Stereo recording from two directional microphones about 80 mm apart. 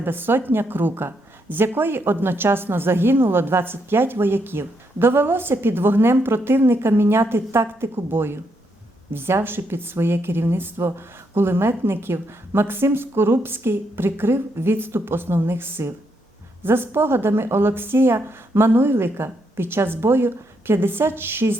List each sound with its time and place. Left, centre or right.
0.0 s a woman's voice: right